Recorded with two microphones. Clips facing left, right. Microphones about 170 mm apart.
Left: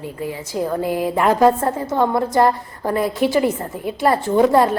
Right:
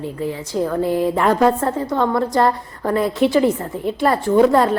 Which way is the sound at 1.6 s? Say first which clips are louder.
Even; 25° left (ahead or behind).